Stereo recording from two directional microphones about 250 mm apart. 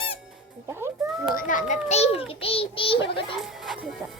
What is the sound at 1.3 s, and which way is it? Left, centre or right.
A child's voice, left.